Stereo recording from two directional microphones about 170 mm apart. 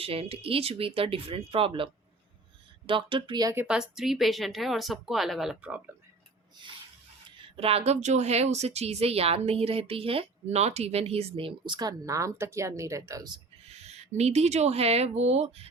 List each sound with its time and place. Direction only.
0.0 s speech: 35° right (ahead or behind)
3.5 s speech: 10° right (ahead or behind)
7.4 s speech: 35° right (ahead or behind)
13.9 s speech: 40° right (ahead or behind)